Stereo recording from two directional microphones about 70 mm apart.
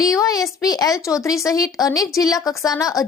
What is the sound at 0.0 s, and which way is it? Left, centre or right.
A woman's voice, left.